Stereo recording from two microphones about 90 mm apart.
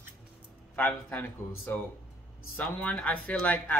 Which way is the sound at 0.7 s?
20° left (ahead or behind).